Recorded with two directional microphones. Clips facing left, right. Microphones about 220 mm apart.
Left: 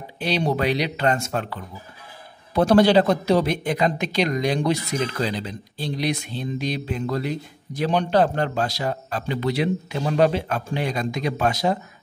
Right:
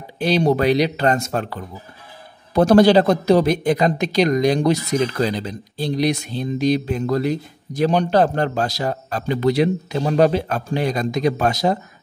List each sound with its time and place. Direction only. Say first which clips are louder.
0.2 s speech: right 6 dB; 45° right (ahead or behind)